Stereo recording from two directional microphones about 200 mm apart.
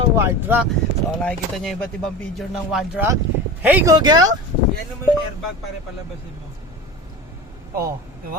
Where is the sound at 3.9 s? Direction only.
20° right (ahead or behind).